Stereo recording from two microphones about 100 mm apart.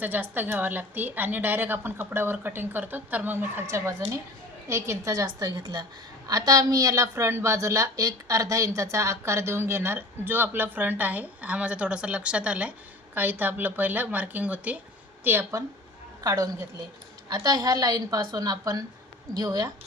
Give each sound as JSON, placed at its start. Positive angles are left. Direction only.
{"t": 0.0, "sound": "a woman's voice", "side_deg": -15}
{"t": 16.2, "sound": "a woman's voice", "side_deg": -35}